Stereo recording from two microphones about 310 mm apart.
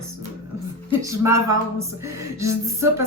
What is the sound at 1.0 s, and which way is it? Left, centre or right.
A woman's voice, centre.